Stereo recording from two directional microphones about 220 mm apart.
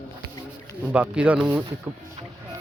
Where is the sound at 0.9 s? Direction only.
5° right (ahead or behind).